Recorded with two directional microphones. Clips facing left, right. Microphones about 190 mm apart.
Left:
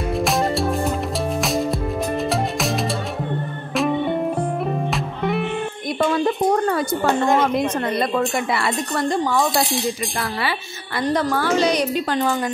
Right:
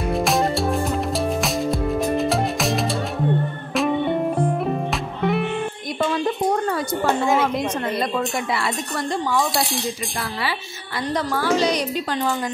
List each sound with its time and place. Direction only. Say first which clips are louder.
0.2 s music: left 1 dB; centre (ahead or behind)
8.5 s speech: left 3 dB; 55° left (ahead or behind)
11.1 s a woman's voice: even; 55° left (ahead or behind)